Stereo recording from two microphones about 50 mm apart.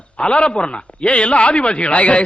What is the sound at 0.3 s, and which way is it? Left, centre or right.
A man's voice, centre.